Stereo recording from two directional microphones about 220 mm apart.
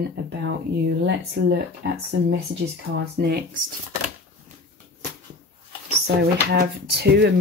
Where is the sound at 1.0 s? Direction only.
50° right (ahead or behind).